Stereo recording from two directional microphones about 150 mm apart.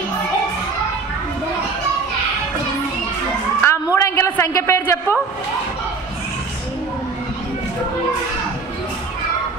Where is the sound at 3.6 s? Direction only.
20° left (ahead or behind).